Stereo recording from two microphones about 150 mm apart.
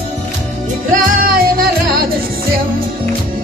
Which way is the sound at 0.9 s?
75° right (ahead or behind).